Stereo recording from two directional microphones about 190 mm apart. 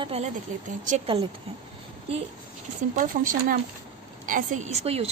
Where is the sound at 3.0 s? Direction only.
45° right (ahead or behind).